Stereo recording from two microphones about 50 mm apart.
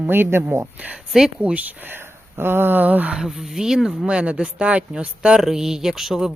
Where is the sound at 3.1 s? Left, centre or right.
Centre.